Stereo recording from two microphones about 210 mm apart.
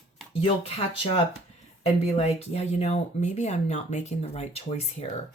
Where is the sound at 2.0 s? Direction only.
30° left (ahead or behind).